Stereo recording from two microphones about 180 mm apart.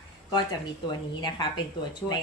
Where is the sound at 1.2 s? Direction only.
25° left (ahead or behind).